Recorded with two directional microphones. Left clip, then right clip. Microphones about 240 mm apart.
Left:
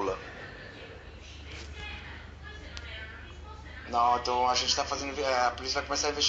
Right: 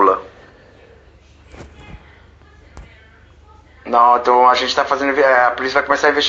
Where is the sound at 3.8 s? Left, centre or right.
Right.